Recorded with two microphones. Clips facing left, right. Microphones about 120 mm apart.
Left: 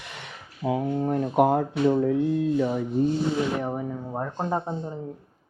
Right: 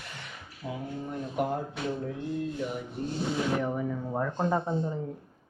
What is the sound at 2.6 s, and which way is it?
Rub, 90° left.